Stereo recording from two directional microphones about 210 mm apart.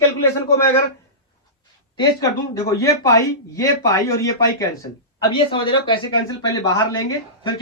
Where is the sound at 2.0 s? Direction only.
15° left (ahead or behind).